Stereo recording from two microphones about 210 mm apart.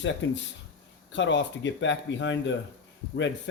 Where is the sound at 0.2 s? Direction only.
60° left (ahead or behind).